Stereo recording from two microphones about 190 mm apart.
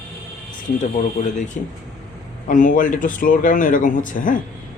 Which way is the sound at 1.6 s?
45° left (ahead or behind).